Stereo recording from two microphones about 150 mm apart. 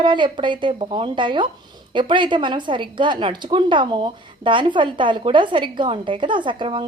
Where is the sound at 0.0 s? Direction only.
35° right (ahead or behind).